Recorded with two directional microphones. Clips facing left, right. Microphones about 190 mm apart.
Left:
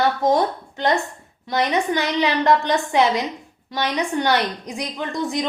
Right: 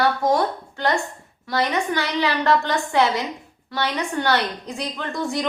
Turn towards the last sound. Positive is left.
turn(degrees=20)  # may be behind; listen again after turning